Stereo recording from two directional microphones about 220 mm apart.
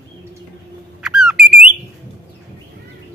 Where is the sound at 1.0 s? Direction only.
5° right (ahead or behind).